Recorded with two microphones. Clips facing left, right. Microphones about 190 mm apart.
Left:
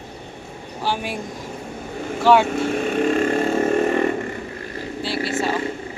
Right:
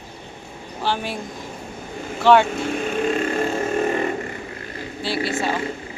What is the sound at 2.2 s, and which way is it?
Speech, 5° left (ahead or behind).